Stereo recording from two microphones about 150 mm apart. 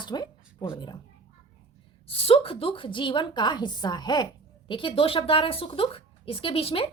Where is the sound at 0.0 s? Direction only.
30° left (ahead or behind).